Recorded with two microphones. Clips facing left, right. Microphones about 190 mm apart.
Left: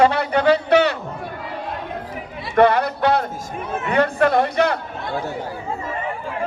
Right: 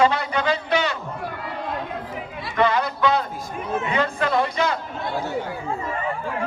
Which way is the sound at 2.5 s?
60° left (ahead or behind).